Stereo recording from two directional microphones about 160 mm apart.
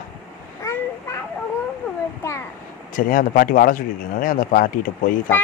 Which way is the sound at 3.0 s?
60° left (ahead or behind).